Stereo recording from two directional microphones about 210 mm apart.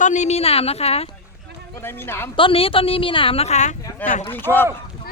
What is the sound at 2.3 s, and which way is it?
A woman's voice, 25° left (ahead or behind).